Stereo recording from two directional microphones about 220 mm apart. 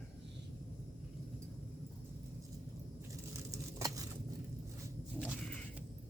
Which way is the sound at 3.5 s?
15° right (ahead or behind).